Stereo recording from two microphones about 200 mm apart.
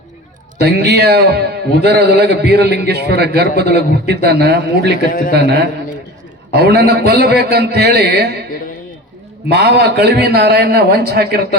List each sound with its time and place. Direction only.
0.6 s a man's voice: 55° right (ahead or behind)
9.5 s a man's voice: 55° right (ahead or behind)